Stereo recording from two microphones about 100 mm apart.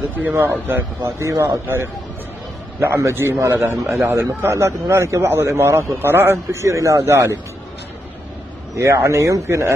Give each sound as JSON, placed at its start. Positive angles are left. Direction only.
{"t": 0.2, "sound": "a man's voice", "side_deg": -20}
{"t": 8.7, "sound": "speech", "side_deg": -30}